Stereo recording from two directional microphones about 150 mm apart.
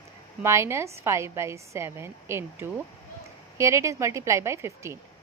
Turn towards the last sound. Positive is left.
turn(degrees=-20)  # may be behind; listen again after turning